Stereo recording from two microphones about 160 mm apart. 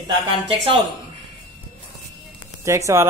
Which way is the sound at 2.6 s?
20° right (ahead or behind).